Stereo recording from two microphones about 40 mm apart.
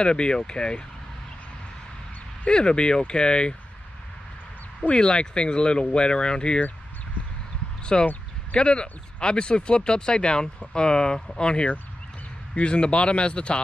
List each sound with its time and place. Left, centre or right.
0.0 s speech: left
2.4 s speech: left
4.9 s speech: left
7.8 s speech: left